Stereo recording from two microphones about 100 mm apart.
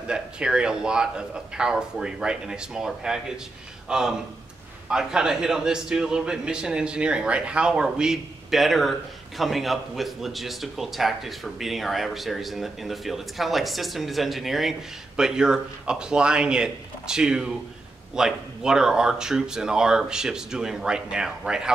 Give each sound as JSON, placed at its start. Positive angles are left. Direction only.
{"t": 0.1, "sound": "a man's voice", "side_deg": -10}